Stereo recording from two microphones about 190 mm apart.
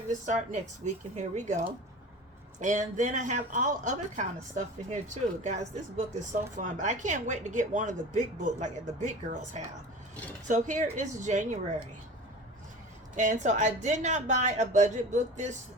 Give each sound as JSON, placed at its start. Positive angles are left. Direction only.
{"t": 0.1, "sound": "speech", "side_deg": -40}
{"t": 6.6, "sound": "speech", "side_deg": -40}
{"t": 13.1, "sound": "speech", "side_deg": -40}